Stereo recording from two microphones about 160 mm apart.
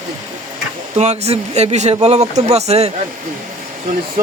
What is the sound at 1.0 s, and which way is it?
Speech, 45° right (ahead or behind).